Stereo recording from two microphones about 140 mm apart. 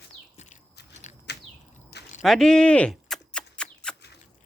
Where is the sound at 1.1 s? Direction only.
60° left (ahead or behind).